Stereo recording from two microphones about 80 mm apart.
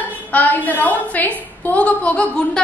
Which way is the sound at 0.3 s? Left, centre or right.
Left.